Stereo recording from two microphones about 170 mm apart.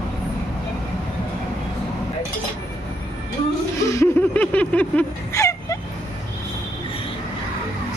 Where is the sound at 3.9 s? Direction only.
15° left (ahead or behind).